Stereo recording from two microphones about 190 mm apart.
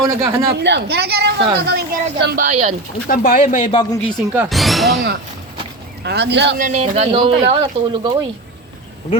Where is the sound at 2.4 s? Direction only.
35° right (ahead or behind).